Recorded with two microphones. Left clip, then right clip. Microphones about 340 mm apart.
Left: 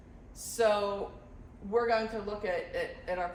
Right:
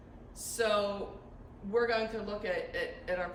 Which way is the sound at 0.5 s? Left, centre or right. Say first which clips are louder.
Left 3 dB; centre.